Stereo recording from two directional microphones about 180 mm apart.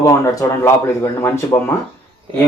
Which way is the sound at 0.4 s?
15° left (ahead or behind).